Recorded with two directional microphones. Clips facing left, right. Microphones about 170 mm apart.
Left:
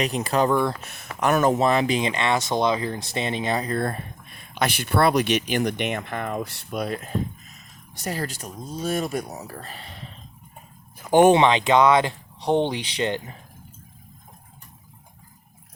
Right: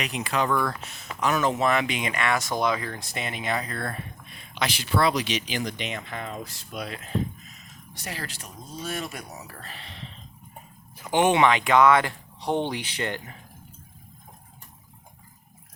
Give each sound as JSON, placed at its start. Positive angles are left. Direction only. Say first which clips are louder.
{"t": 0.0, "sound": "speech", "louder": "left 5 dB", "side_deg": 40}
{"t": 0.5, "sound": "speech", "louder": "left 4 dB", "side_deg": 25}
{"t": 0.8, "sound": "speech", "louder": "left 3 dB", "side_deg": 55}
{"t": 1.5, "sound": "speech", "louder": "left 4 dB", "side_deg": 30}
{"t": 11.1, "sound": "speech", "louder": "left 7 dB", "side_deg": 45}
{"t": 11.3, "sound": "speech", "louder": "left 2 dB", "side_deg": 25}